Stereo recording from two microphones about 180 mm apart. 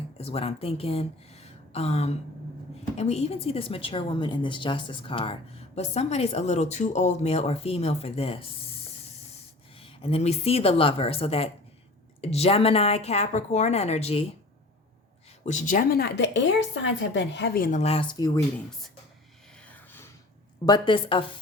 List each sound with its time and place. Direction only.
0.2 s a woman's voice: 35° left (ahead or behind)
9.7 s a woman's voice: 30° left (ahead or behind)
15.4 s speech: 45° left (ahead or behind); by 18.3 s 25° left (ahead or behind)
19.6 s a sound: 10° left (ahead or behind)
20.7 s a woman's voice: 25° left (ahead or behind)